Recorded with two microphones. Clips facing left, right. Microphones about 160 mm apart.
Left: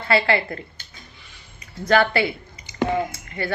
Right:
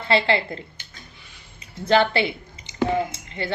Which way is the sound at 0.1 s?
25° right (ahead or behind).